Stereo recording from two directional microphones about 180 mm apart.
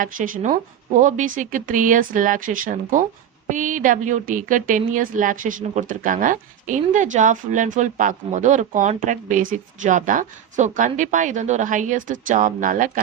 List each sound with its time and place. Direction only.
0.0 s speech: 50° right (ahead or behind)